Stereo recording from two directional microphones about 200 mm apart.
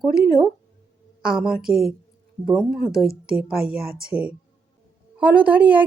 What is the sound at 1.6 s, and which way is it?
Speech, centre (ahead or behind).